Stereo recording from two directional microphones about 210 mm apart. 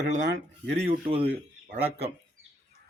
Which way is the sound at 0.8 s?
25° right (ahead or behind).